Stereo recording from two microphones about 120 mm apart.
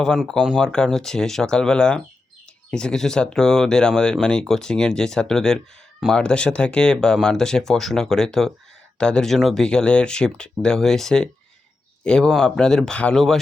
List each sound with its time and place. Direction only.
0.0 s speech: 5° left (ahead or behind)